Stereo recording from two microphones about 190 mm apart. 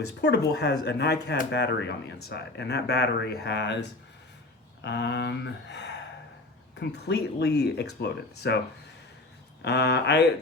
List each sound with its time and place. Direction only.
0.2 s speech: 60° left (ahead or behind)
9.6 s speech: 60° left (ahead or behind)